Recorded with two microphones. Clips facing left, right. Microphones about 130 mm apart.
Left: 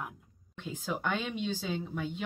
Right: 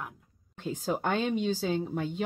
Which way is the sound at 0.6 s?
40° right (ahead or behind).